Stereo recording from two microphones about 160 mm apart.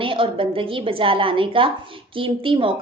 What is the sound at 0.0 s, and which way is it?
A woman's voice, 35° right (ahead or behind).